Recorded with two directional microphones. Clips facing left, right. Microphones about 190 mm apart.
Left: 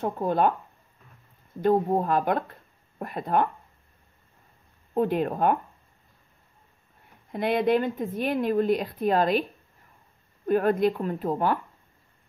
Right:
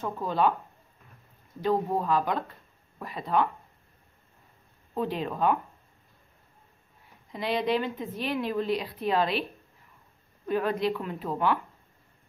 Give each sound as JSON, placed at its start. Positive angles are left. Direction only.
{"t": 0.0, "sound": "speech", "side_deg": 55}
{"t": 1.6, "sound": "speech", "side_deg": 50}
{"t": 4.9, "sound": "speech", "side_deg": 50}
{"t": 7.3, "sound": "speech", "side_deg": 55}